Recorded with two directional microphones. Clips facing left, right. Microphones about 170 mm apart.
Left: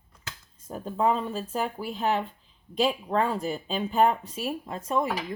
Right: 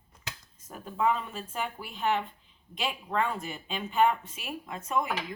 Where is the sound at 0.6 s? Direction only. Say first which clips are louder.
Left 3 dB; 35° left (ahead or behind).